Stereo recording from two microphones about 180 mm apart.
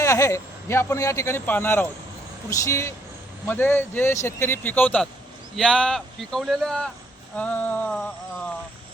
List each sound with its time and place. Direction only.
0.0 s a man's voice: 15° left (ahead or behind)